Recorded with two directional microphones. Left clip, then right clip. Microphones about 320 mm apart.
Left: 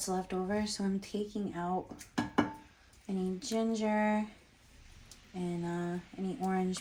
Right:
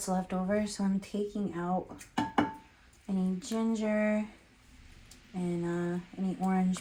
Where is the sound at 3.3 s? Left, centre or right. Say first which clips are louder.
Left 1 dB; right.